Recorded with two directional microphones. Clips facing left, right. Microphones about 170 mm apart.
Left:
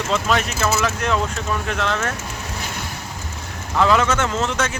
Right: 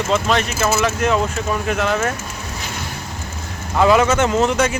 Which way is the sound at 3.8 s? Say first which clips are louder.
Right 4 dB; 10° right (ahead or behind).